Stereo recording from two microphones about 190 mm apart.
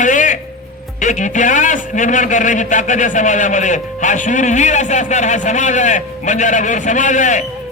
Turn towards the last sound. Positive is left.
turn(degrees=40)  # may be behind; listen again after turning